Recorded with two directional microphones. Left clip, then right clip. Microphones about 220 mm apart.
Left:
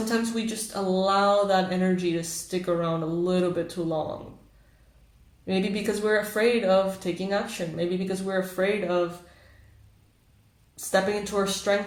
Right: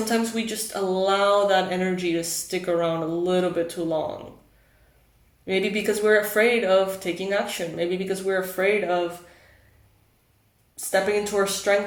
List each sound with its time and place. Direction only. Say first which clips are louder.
0.1 s speech: right 3 dB; 25° right (ahead or behind)
5.5 s speech: right 4 dB; 25° right (ahead or behind)
10.8 s speech: right 2 dB; 25° right (ahead or behind)